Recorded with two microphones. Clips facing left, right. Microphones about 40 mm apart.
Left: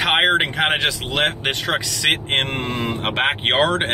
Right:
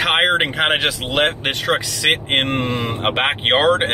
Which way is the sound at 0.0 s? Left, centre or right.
Centre.